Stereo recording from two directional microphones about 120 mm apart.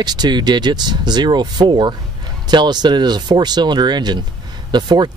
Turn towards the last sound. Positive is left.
turn(degrees=-40)  # may be behind; listen again after turning